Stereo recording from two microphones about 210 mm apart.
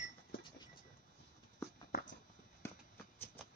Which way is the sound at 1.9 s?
45° left (ahead or behind).